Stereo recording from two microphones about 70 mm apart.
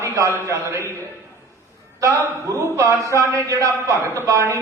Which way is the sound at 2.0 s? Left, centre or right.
Right.